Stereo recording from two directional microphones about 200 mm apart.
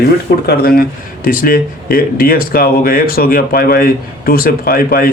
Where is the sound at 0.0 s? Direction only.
50° left (ahead or behind).